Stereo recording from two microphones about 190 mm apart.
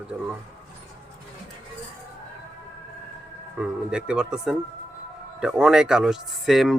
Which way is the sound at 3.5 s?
5° right (ahead or behind).